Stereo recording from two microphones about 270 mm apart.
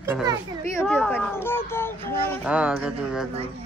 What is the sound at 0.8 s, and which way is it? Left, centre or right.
Speech, centre.